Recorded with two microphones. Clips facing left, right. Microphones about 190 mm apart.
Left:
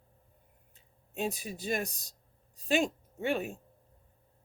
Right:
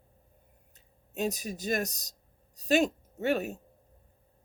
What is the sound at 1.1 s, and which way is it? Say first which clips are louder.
A woman's voice: right 3 dB; 40° right (ahead or behind).